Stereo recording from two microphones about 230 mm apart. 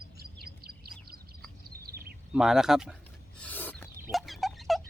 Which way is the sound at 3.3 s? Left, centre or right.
Centre.